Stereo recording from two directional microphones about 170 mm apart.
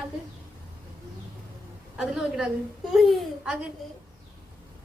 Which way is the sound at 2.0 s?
5° right (ahead or behind).